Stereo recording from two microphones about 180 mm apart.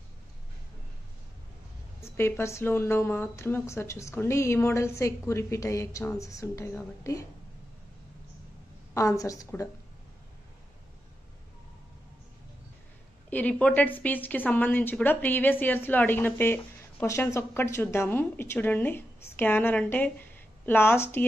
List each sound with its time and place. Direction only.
2.0 s a woman's voice: 15° left (ahead or behind)
8.9 s a woman's voice: 20° left (ahead or behind)
13.3 s a woman's voice: 10° left (ahead or behind)